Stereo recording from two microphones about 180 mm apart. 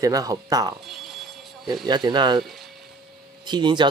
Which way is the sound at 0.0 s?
20° right (ahead or behind).